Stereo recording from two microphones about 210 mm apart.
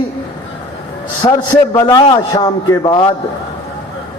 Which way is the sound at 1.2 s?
20° left (ahead or behind).